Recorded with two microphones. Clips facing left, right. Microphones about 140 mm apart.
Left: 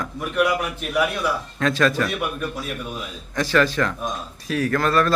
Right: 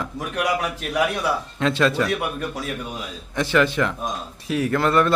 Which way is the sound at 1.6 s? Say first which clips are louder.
Even; 25° right (ahead or behind).